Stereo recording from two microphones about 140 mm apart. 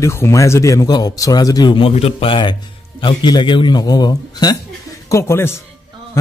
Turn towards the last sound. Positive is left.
turn(degrees=20)  # may be behind; listen again after turning